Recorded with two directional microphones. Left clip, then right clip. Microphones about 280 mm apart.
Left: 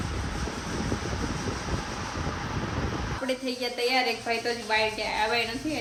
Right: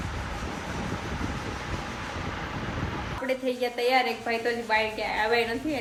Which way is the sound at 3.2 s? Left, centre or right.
Centre.